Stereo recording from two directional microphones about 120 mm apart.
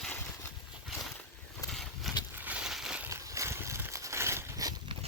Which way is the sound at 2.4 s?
10° right (ahead or behind).